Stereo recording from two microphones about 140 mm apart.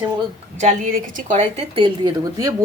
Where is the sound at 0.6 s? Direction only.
80° right.